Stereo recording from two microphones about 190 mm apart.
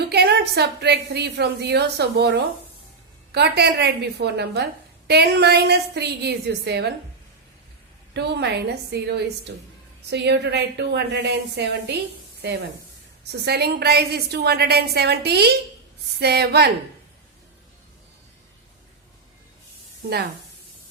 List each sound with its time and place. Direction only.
0.1 s a woman's voice: 60° right (ahead or behind)
8.1 s a woman's voice: 60° right (ahead or behind)